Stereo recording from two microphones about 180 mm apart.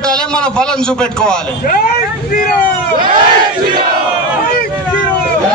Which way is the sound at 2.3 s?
50° left (ahead or behind).